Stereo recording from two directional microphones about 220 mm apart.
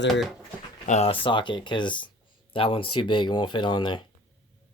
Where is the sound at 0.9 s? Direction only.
30° left (ahead or behind).